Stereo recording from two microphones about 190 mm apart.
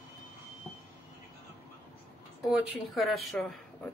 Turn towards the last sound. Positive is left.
turn(degrees=0)  # may be behind; listen again after turning